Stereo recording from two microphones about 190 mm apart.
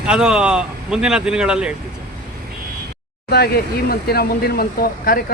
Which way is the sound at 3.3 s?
55° left (ahead or behind).